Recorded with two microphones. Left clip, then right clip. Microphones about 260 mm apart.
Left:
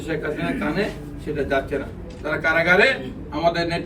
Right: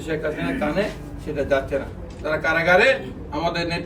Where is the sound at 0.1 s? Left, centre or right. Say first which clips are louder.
Even; centre.